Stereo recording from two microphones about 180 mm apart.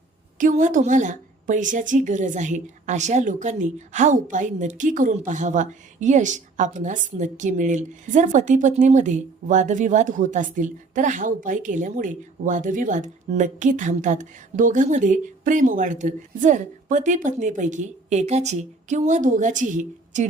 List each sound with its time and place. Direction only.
0.3 s a woman's voice: 45° right (ahead or behind)